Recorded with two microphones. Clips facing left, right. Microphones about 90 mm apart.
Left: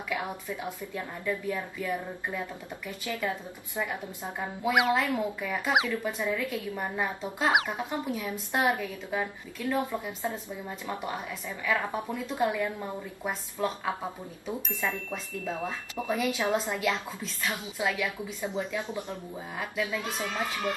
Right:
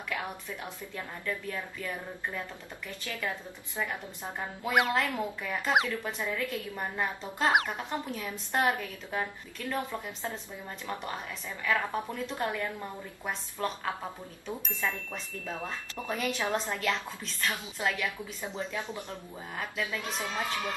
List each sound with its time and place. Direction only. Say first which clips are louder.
0.1 s speech: left 3 dB; 15° left (ahead or behind)